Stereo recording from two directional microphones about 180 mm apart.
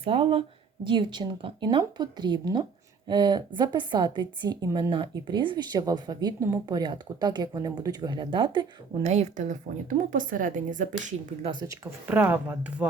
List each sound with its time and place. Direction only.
0.0 s a woman's voice: 30° right (ahead or behind)
9.0 s a woman's voice: 40° right (ahead or behind)
11.7 s speech: 10° right (ahead or behind)